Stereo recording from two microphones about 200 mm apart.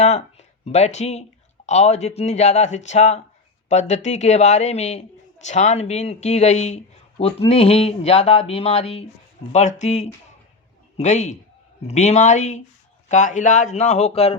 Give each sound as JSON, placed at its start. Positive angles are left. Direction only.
{"t": 0.0, "sound": "speech", "side_deg": 35}